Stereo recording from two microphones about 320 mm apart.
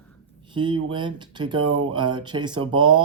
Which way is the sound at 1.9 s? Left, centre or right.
Centre.